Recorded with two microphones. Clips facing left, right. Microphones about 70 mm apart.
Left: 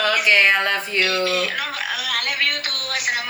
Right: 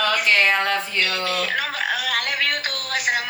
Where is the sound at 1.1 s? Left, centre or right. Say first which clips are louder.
Left 3 dB; right.